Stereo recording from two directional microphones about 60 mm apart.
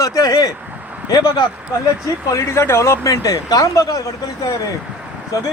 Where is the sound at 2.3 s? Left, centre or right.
Left.